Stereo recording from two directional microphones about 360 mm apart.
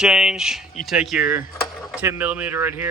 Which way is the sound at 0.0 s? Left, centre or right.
Centre.